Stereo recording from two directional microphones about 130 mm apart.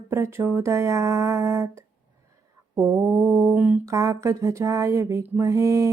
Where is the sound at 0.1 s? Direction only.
20° right (ahead or behind).